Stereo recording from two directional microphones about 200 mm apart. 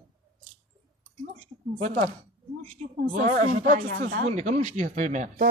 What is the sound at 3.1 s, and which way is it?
Speech, 40° right (ahead or behind).